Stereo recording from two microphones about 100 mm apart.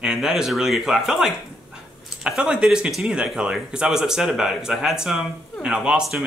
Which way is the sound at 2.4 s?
10° right (ahead or behind).